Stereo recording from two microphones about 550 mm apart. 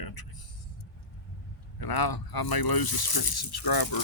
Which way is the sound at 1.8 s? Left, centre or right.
Left.